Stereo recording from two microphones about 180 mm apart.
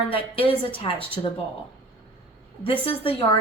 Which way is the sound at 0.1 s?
30° left (ahead or behind).